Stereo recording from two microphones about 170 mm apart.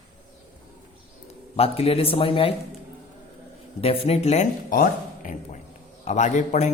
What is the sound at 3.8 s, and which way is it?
A man's voice, 35° left (ahead or behind).